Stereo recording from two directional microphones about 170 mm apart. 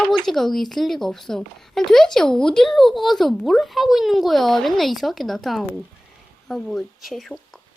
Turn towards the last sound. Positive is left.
turn(degrees=0)  # may be behind; listen again after turning